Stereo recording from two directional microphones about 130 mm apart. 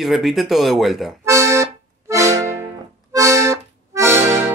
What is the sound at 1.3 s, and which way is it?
Accordion, 20° right (ahead or behind).